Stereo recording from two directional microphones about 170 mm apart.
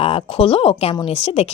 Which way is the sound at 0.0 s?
35° left (ahead or behind).